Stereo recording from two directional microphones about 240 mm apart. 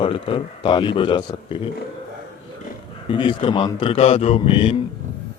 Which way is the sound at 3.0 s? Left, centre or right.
Left.